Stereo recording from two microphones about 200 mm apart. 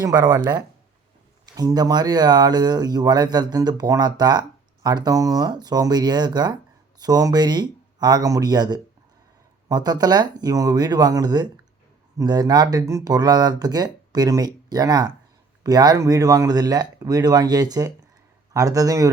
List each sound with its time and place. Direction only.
0.0 s a man's voice: 20° right (ahead or behind)